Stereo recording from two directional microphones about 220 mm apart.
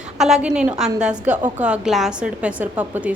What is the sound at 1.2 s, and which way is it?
Speech, 35° right (ahead or behind).